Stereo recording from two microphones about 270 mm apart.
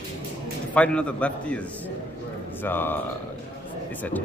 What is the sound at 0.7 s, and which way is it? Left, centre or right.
A man's voice, centre.